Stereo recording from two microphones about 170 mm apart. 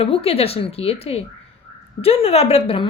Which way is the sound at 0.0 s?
35° left (ahead or behind).